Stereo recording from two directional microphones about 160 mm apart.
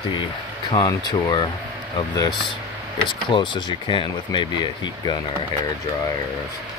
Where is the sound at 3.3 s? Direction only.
30° left (ahead or behind).